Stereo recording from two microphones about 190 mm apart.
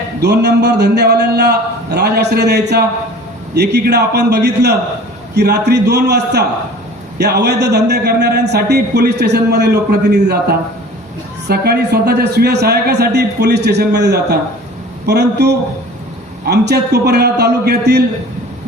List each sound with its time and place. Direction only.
0.2 s a man's voice: 60° right (ahead or behind)
11.4 s a man's voice: 60° right (ahead or behind)